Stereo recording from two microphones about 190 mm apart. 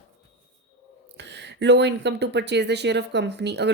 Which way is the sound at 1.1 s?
65° right (ahead or behind).